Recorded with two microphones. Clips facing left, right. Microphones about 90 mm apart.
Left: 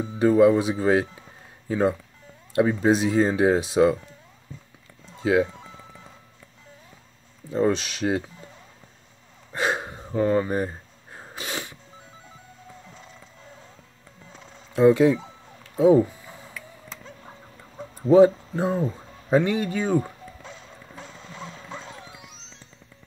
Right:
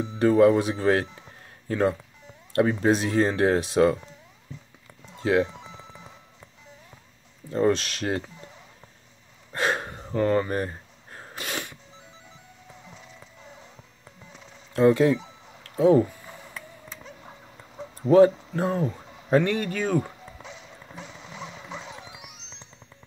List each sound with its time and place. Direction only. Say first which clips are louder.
0.2 s speech: left 1 dB; 10° left (ahead or behind)
5.1 s speech: left 1 dB; 10° left (ahead or behind)
5.5 s music: even; 20° right (ahead or behind)
7.5 s speech: even; 5° left (ahead or behind)
9.5 s gasp: left 1 dB; 5° left (ahead or behind)
14.7 s speech: left 2 dB; 10° left (ahead or behind)
15.8 s a sound: left 2 dB; 5° left (ahead or behind)
18.1 s speech: left 1 dB; 15° left (ahead or behind)
20.4 s music: even; 15° right (ahead or behind)